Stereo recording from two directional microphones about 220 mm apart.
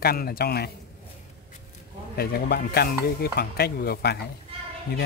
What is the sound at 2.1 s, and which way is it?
Speech, 45° left (ahead or behind).